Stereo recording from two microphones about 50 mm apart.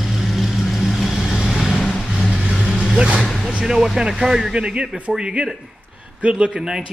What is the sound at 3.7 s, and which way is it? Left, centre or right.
Speech, centre.